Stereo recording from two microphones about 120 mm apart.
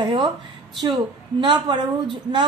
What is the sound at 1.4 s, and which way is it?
Speech, 40° right (ahead or behind).